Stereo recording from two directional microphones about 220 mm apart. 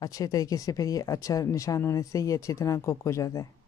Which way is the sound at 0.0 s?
15° left (ahead or behind).